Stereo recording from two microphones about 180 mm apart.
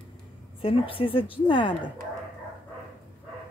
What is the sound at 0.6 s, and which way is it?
A woman's voice, 30° left (ahead or behind).